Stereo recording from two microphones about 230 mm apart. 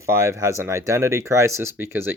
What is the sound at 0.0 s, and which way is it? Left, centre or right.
Speech, centre.